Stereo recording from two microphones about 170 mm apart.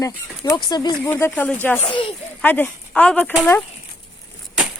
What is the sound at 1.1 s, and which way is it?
Speech, 10° left (ahead or behind).